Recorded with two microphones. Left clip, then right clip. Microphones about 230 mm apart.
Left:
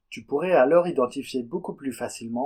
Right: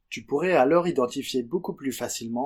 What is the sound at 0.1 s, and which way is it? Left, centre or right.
Speech, right.